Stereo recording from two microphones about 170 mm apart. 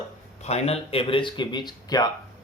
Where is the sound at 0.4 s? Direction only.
40° left (ahead or behind).